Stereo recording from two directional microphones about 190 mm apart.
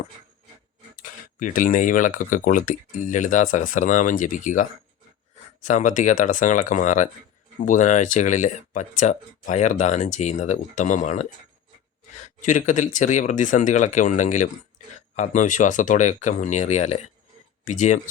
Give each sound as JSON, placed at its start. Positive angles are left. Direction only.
{"t": 0.9, "sound": "speech", "side_deg": 45}
{"t": 5.6, "sound": "speech", "side_deg": 40}